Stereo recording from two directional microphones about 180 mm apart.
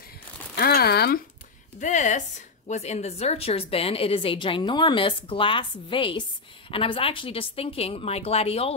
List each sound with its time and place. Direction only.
0.6 s speech: 60° left (ahead or behind)
1.8 s a woman's voice: 40° left (ahead or behind)